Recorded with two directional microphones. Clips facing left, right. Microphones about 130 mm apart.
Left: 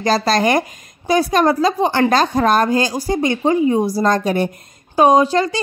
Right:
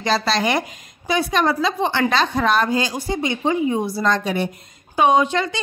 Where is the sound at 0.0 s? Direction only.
40° left (ahead or behind).